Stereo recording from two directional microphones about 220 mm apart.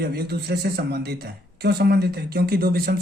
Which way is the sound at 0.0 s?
45° right (ahead or behind).